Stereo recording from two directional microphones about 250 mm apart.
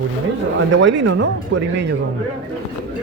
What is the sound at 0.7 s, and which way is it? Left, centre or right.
Speech, right.